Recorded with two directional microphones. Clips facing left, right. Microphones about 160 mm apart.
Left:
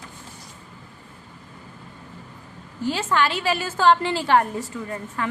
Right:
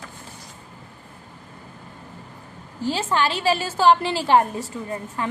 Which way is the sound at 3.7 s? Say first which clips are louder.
Even; 15° right (ahead or behind).